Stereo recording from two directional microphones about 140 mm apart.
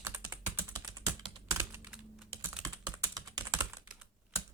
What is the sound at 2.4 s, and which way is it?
Typing, 10° right (ahead or behind).